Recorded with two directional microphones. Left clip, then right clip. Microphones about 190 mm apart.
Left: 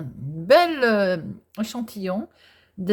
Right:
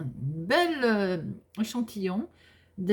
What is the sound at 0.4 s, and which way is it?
Speech, 30° left (ahead or behind).